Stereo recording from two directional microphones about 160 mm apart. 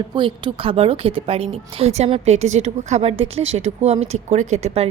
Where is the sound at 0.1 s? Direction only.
30° right (ahead or behind).